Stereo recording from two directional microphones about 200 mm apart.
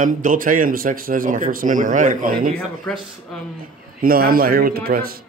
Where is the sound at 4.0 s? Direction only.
45° right (ahead or behind).